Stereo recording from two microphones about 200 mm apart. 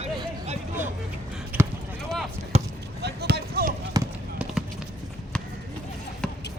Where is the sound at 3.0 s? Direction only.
55° right (ahead or behind).